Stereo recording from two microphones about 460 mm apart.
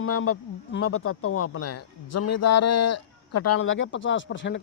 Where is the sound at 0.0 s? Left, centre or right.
Left.